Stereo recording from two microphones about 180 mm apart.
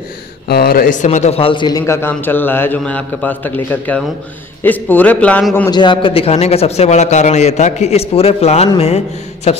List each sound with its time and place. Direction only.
0.5 s a man's voice: 60° left (ahead or behind); by 5.7 s 10° left (ahead or behind)
5.7 s a man's voice: 25° left (ahead or behind)